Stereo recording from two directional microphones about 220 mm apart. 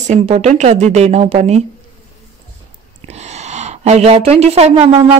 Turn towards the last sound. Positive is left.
turn(degrees=-25)  # may be behind; listen again after turning